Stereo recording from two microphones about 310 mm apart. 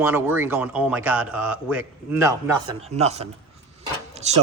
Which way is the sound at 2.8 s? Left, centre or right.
Right.